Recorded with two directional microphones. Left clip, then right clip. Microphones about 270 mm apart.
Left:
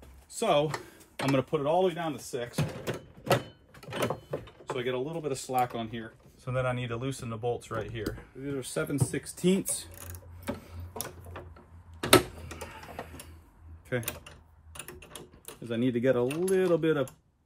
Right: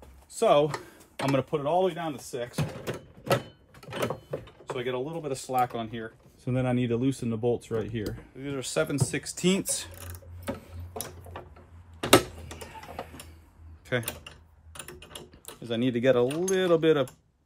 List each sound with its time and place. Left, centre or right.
0.0 s speech: centre
8.4 s speech: centre
9.9 s mechanisms: centre
12.0 s tick-tock: centre
13.8 s typing: centre
16.6 s speech: centre